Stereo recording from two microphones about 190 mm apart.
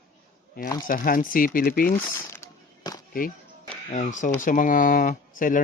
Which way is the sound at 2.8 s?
20° left (ahead or behind).